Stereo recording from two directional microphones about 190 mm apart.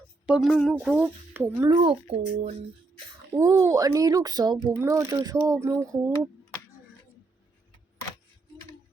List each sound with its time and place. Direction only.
0.3 s a woman's voice: centre (ahead or behind)
1.7 s speech: 30° right (ahead or behind)
3.3 s a woman's voice: 15° right (ahead or behind)